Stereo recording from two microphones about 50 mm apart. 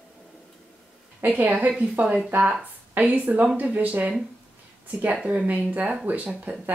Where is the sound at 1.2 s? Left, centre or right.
Right.